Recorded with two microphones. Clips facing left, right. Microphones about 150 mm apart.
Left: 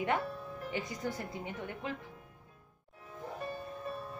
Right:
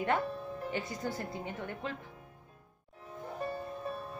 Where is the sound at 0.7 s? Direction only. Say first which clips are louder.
Left 1 dB; 15° left (ahead or behind).